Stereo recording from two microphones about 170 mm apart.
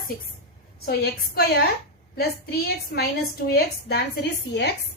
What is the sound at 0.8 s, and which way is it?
A woman's voice, 70° left (ahead or behind).